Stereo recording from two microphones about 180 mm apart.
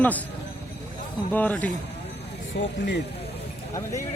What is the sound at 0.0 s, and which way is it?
Speech, 10° left (ahead or behind).